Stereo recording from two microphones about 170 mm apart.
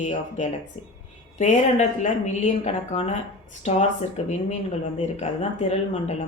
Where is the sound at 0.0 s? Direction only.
45° left (ahead or behind).